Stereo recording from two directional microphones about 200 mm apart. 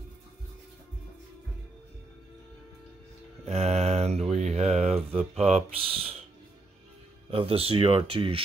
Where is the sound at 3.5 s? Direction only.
30° right (ahead or behind).